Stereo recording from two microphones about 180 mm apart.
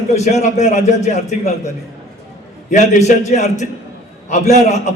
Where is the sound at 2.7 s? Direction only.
40° left (ahead or behind).